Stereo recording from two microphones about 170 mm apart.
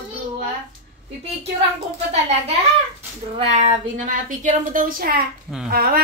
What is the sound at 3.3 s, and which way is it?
Speech, 35° right (ahead or behind).